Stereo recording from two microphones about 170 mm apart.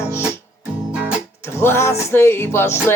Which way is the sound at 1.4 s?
15° left (ahead or behind).